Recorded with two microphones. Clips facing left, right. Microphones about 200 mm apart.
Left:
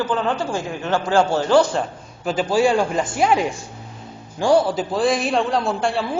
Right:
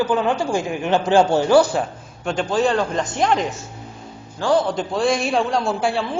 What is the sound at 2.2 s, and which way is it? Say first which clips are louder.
A man's voice: left 2 dB; 5° left (ahead or behind).